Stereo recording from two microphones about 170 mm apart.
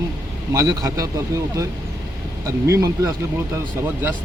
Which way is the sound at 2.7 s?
15° right (ahead or behind).